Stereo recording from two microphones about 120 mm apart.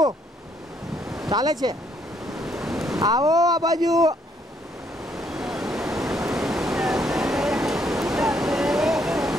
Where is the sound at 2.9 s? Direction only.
30° right (ahead or behind).